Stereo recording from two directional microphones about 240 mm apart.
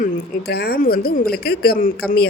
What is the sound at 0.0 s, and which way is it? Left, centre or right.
Speech, left.